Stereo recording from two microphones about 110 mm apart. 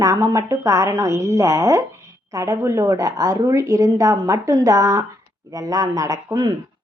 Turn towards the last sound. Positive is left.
turn(degrees=-35)  # may be behind; listen again after turning